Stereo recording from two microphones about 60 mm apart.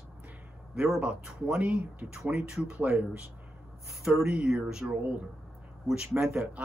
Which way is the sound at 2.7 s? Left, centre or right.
Right.